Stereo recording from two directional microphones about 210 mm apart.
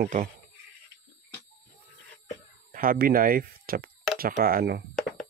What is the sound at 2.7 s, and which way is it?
Speech, 45° right (ahead or behind).